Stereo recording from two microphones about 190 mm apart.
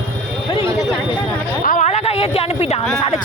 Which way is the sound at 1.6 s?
40° left (ahead or behind).